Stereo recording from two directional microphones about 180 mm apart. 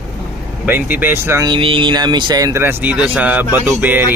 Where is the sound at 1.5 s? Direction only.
30° right (ahead or behind).